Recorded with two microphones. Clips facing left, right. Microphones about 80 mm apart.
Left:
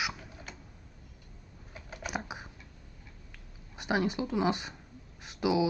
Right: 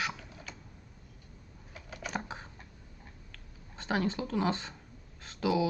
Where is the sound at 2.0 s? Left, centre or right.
Centre.